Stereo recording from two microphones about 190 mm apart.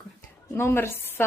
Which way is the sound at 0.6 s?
15° left (ahead or behind).